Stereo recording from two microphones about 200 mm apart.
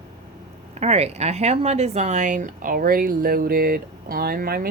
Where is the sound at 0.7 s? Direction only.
30° right (ahead or behind).